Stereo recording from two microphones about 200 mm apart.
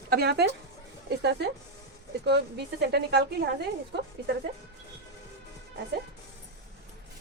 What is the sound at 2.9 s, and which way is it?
Speech, 55° right (ahead or behind).